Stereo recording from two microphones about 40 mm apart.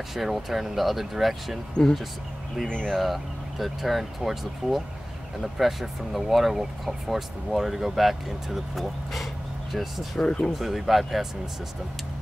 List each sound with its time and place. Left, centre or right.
0.1 s speech: centre
2.8 s speech: centre
10.2 s speech: left
10.6 s speech: centre